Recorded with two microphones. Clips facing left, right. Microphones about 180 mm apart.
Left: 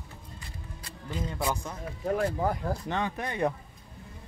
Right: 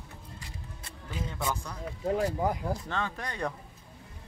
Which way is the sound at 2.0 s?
15° right (ahead or behind).